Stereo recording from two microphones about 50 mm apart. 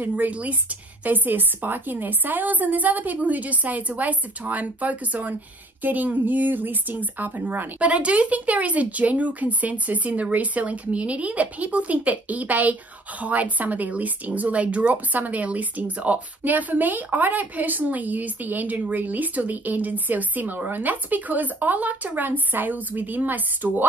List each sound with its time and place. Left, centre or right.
0.0 s speech: right
7.8 s speech: right